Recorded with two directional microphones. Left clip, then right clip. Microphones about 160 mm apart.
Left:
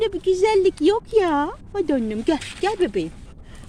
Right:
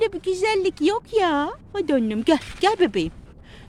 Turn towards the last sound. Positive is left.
turn(degrees=-45)  # may be behind; listen again after turning